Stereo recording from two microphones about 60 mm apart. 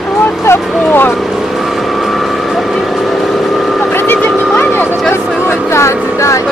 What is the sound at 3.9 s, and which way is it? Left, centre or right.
Vehicle, left.